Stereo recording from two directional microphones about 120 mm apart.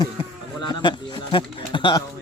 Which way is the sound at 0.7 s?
40° left (ahead or behind).